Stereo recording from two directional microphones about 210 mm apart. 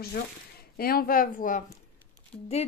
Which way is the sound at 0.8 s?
45° left (ahead or behind).